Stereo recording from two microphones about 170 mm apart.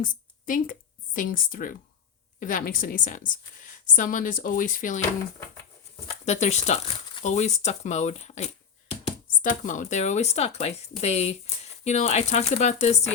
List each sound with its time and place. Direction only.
0.0 s a woman's voice: 50° left (ahead or behind)
6.1 s a woman's voice: 40° left (ahead or behind)